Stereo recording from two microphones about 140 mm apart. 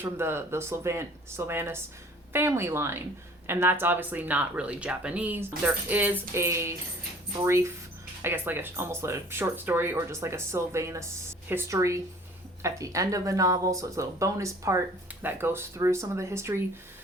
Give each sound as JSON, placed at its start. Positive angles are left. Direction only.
{"t": 0.0, "sound": "speech", "side_deg": -15}